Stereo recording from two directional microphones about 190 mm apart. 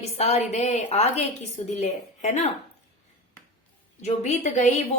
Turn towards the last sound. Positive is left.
turn(degrees=35)  # may be behind; listen again after turning